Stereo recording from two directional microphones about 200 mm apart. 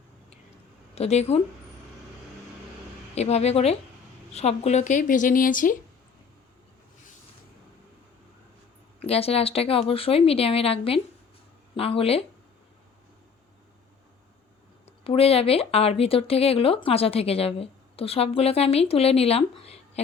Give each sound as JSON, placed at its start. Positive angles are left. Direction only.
{"t": 0.9, "sound": "speech", "side_deg": 35}
{"t": 3.2, "sound": "speech", "side_deg": 30}
{"t": 9.0, "sound": "speech", "side_deg": 30}
{"t": 14.8, "sound": "speech", "side_deg": 30}